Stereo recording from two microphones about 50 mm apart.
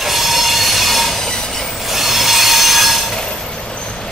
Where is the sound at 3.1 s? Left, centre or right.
Centre.